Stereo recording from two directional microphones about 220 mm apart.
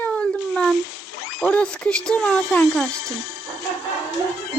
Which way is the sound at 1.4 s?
5° left (ahead or behind).